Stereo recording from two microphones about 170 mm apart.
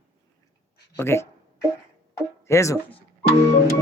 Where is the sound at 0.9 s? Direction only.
15° left (ahead or behind).